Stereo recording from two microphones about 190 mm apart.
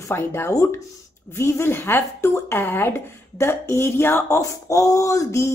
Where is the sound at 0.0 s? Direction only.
15° left (ahead or behind).